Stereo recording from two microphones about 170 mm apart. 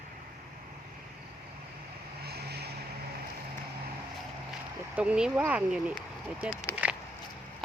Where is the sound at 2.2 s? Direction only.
70° right (ahead or behind).